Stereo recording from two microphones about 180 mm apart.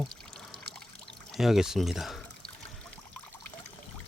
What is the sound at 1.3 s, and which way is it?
Speech, centre (ahead or behind).